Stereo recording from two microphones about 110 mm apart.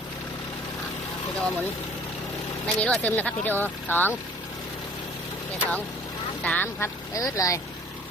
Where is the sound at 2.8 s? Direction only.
15° left (ahead or behind).